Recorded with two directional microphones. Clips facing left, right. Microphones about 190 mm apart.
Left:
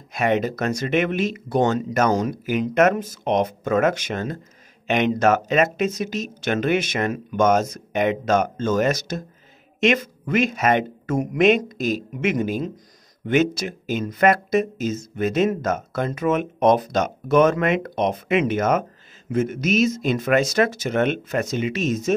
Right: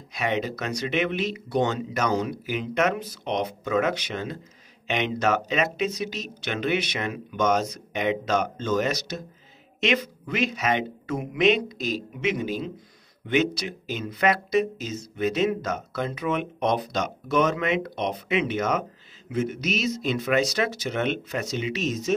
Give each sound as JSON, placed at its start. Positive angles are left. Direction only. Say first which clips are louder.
{"t": 0.1, "sound": "speech", "louder": "left 6 dB", "side_deg": 50}